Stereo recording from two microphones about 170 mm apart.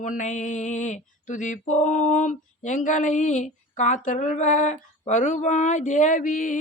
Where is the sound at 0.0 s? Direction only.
45° left (ahead or behind).